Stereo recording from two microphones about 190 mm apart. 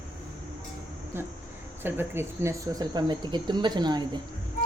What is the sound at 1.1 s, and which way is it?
Speech, 10° right (ahead or behind).